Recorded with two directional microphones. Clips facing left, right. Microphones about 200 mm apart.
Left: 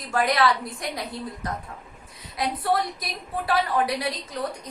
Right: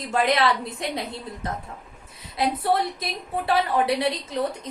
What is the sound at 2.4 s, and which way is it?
A woman's voice, 25° right (ahead or behind).